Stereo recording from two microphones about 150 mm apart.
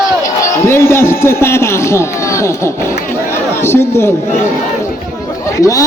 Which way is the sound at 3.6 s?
15° left (ahead or behind).